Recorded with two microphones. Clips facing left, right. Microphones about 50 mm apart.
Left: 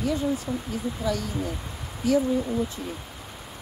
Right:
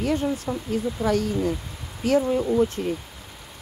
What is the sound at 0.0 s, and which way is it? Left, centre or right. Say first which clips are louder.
Speech: right 2 dB; right.